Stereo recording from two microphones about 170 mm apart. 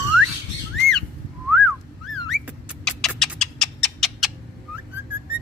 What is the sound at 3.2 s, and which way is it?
Cat, centre (ahead or behind).